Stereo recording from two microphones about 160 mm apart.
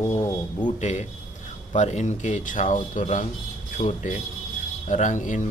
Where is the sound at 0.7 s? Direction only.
45° left (ahead or behind).